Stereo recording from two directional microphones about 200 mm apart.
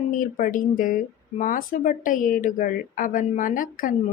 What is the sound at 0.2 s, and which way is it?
A woman's voice, 40° left (ahead or behind).